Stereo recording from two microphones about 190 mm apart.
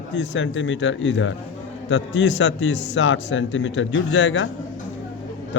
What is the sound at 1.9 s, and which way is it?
A man's voice, 70° left (ahead or behind).